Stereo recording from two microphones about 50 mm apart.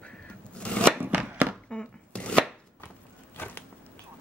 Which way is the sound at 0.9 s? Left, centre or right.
Right.